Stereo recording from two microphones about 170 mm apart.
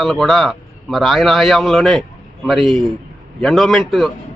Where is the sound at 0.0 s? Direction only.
Centre (ahead or behind).